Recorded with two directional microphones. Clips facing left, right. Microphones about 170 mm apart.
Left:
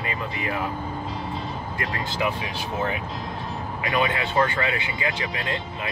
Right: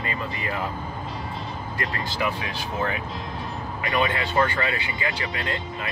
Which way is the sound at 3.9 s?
20° left (ahead or behind).